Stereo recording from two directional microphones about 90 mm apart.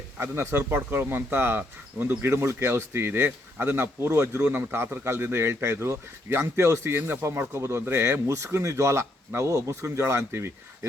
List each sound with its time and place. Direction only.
0.2 s a man's voice: 25° right (ahead or behind)